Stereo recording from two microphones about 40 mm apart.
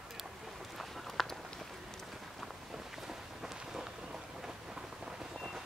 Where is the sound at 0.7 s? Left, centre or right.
Centre.